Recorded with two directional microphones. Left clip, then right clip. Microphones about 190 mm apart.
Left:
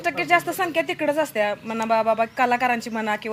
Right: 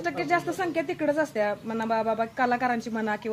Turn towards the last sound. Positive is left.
turn(degrees=20)  # may be behind; listen again after turning